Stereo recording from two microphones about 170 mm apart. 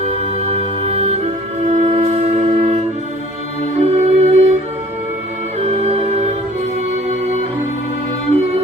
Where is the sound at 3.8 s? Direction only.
40° right (ahead or behind).